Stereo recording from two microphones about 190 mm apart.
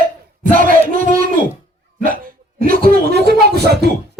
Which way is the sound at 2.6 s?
50° right (ahead or behind).